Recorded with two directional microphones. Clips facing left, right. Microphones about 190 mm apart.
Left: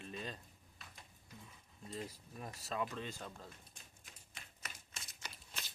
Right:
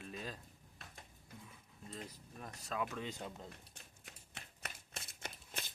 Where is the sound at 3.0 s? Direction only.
15° right (ahead or behind).